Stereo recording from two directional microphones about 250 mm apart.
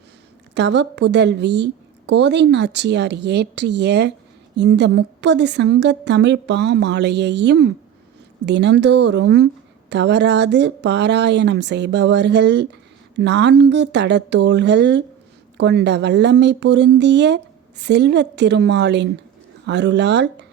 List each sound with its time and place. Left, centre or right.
0.5 s a woman's voice: right